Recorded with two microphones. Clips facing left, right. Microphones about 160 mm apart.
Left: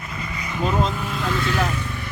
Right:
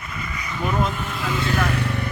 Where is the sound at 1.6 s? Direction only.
65° right (ahead or behind).